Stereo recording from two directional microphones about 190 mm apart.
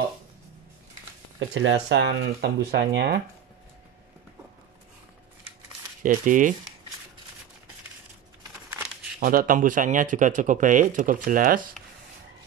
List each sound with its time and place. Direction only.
1.5 s speech: 75° right (ahead or behind); by 3.2 s 60° right (ahead or behind)
6.0 s speech: 45° right (ahead or behind)
9.2 s speech: 50° right (ahead or behind)